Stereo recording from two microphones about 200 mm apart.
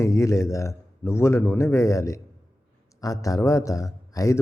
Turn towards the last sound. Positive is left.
turn(degrees=15)  # may be behind; listen again after turning